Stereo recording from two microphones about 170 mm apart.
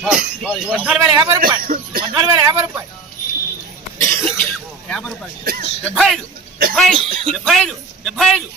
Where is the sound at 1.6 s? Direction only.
55° right (ahead or behind).